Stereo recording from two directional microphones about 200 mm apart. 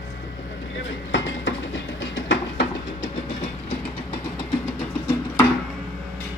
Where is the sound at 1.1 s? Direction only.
70° left (ahead or behind).